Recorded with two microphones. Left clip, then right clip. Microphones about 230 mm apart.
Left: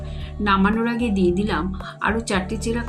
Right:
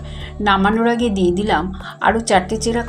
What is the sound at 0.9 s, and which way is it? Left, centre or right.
A woman's voice, centre.